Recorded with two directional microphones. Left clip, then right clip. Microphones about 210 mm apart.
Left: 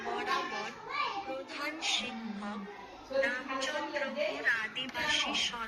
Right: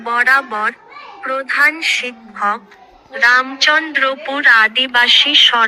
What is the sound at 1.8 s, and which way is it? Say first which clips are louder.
A woman's voice: right 16 dB; 40° right (ahead or behind).